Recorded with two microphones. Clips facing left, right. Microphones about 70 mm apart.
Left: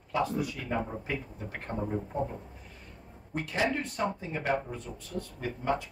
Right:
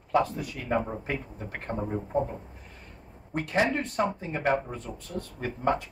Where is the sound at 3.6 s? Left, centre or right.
Right.